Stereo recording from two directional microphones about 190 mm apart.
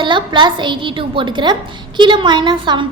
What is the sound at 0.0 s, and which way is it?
A child's voice, 25° right (ahead or behind).